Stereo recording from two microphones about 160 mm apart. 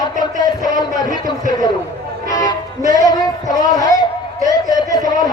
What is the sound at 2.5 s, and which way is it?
Music, 20° left (ahead or behind).